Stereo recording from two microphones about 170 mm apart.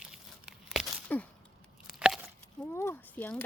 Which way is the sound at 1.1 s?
10° left (ahead or behind).